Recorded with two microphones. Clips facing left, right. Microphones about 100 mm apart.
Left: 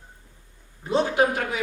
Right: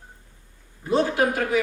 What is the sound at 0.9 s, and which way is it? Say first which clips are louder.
Speech: even; 20° left (ahead or behind).